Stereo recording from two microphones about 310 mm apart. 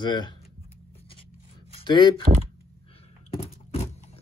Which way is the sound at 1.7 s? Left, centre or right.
Centre.